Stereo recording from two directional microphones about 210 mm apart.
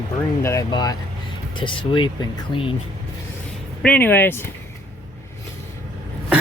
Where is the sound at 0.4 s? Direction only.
15° left (ahead or behind).